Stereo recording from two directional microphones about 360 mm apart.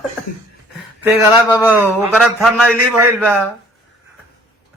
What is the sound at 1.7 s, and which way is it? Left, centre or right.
A man's voice, centre.